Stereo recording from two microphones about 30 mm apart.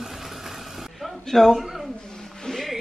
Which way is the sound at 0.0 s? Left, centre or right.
Centre.